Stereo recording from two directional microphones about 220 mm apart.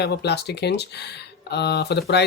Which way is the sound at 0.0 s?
50° left (ahead or behind).